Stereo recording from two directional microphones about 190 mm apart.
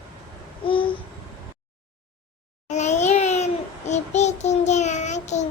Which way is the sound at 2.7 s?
40° left (ahead or behind).